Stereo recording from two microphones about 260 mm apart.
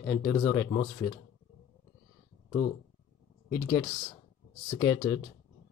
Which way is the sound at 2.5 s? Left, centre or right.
Centre.